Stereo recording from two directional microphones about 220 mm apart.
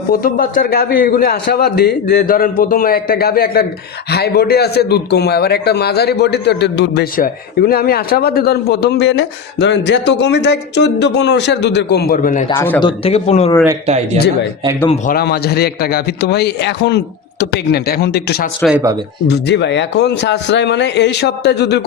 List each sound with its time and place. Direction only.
0.1 s a man's voice: 40° left (ahead or behind)
12.5 s speech: 10° left (ahead or behind)
12.8 s speech: 25° left (ahead or behind)
13.8 s speech: 30° right (ahead or behind)
15.0 s a man's voice: 45° left (ahead or behind)